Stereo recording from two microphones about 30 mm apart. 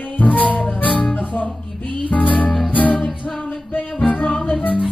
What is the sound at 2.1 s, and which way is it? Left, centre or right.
Music, left.